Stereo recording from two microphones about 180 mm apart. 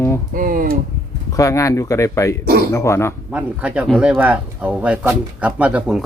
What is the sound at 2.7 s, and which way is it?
Speech, 15° left (ahead or behind).